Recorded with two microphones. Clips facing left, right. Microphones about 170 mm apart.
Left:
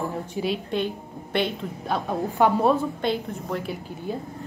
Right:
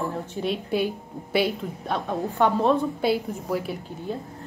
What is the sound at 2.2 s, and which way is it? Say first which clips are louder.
Speech: left 2 dB; 15° left (ahead or behind).